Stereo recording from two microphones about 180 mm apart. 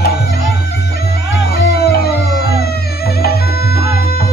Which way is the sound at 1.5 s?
60° left (ahead or behind).